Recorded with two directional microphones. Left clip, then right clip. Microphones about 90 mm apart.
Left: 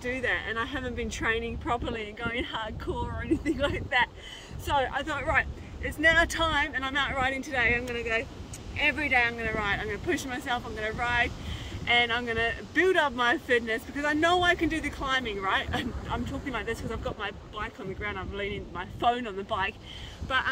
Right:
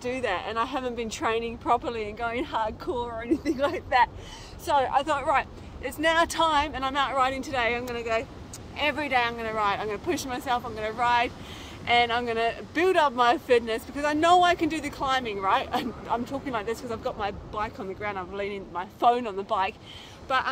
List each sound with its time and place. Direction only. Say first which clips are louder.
0.0 s speech: right 1 dB; 35° left (ahead or behind)
1.7 s speech: right 6 dB; 45° left (ahead or behind)
3.1 s speech: left 1 dB; 65° left (ahead or behind)
5.0 s speech: right 3 dB; 35° left (ahead or behind)